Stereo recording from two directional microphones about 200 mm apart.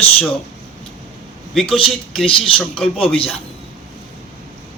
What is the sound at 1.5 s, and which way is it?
Speech, centre (ahead or behind).